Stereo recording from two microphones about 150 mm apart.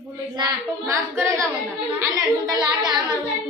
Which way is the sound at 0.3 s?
20° right (ahead or behind).